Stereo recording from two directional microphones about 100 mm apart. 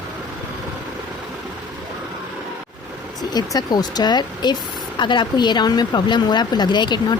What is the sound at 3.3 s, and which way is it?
A woman's voice, 45° left (ahead or behind).